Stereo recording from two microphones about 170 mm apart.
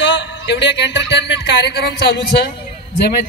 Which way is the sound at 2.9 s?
70° left (ahead or behind).